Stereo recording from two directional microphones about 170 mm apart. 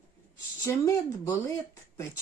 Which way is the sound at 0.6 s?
20° left (ahead or behind).